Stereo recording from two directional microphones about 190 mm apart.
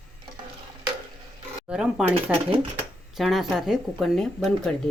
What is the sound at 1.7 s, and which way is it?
Coin, 5° right (ahead or behind).